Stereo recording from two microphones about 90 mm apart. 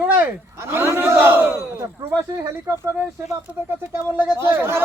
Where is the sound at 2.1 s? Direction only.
35° right (ahead or behind).